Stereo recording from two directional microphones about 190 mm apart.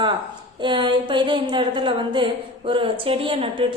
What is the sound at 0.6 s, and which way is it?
A woman's voice, 25° right (ahead or behind).